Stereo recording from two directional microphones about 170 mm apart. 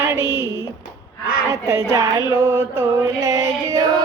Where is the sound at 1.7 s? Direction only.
20° right (ahead or behind).